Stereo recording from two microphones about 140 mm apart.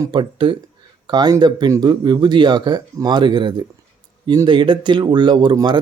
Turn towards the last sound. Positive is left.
turn(degrees=-30)  # may be behind; listen again after turning